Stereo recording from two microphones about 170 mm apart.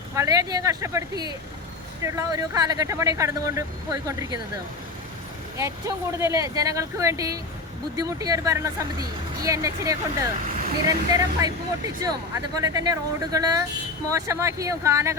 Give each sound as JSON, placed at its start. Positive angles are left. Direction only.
{"t": 0.1, "sound": "speech", "side_deg": -20}
{"t": 5.5, "sound": "speech", "side_deg": -15}